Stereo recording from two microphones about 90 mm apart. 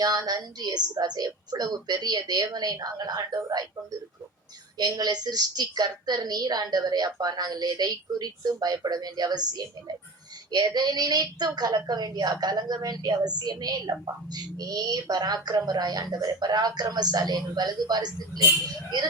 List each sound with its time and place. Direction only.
0.0 s a woman's voice: 50° right (ahead or behind)
4.8 s a woman's voice: 50° right (ahead or behind)
10.8 s a woman's voice: 50° right (ahead or behind)